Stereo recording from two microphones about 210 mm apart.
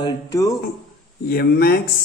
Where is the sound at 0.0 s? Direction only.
15° left (ahead or behind).